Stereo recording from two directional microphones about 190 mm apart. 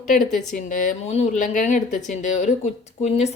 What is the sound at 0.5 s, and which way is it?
A woman's voice, 45° left (ahead or behind).